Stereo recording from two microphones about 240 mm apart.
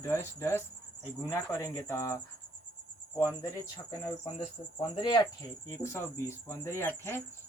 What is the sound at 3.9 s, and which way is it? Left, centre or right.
Speech, centre.